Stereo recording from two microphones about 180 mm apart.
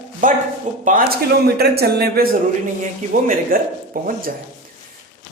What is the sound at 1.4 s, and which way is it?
A woman's voice, 60° right (ahead or behind).